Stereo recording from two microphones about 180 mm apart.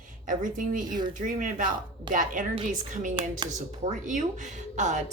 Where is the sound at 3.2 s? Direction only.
25° right (ahead or behind).